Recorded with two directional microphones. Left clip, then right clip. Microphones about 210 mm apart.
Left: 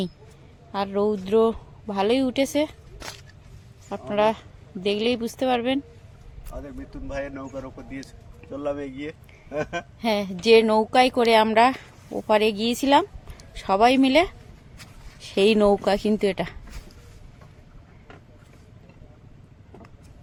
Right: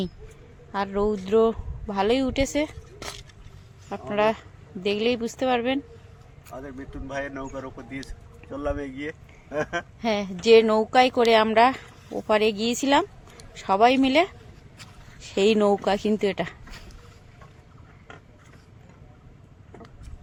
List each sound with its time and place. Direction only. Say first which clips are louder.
0.7 s a woman's voice: left 1 dB; 15° left (ahead or behind)
3.8 s a woman's voice: left 1 dB; 15° left (ahead or behind)
6.5 s a woman's voice: right 1 dB; centre (ahead or behind)
10.0 s a woman's voice: left 2 dB; 20° left (ahead or behind)